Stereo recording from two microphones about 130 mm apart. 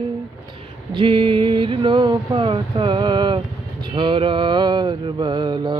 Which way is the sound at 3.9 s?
40° right (ahead or behind).